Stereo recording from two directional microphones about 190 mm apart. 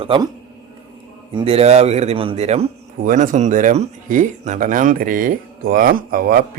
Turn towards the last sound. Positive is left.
turn(degrees=-50)  # may be behind; listen again after turning